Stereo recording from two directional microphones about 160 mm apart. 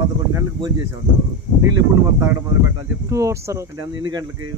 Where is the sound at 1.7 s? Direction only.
15° right (ahead or behind).